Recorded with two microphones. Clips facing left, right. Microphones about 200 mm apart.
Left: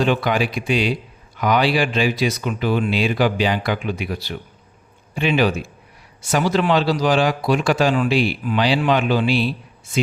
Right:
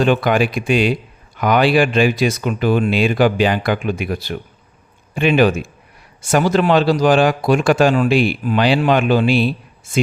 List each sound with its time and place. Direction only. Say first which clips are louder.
0.0 s speech: right 4 dB; 50° right (ahead or behind)